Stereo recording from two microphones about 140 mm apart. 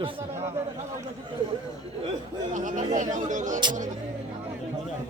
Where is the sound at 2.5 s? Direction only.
65° right (ahead or behind).